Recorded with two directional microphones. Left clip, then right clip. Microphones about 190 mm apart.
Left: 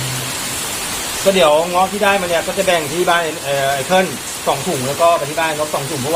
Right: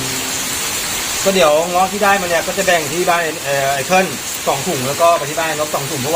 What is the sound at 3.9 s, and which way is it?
Speech, 5° left (ahead or behind).